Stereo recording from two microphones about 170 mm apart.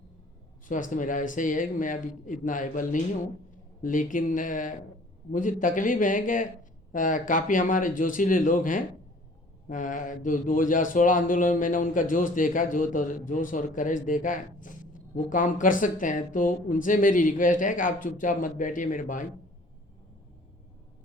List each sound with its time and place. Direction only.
0.7 s a man's voice: 50° left (ahead or behind)